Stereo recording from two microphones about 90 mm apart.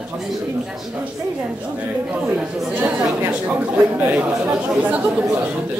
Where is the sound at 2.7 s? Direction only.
15° right (ahead or behind).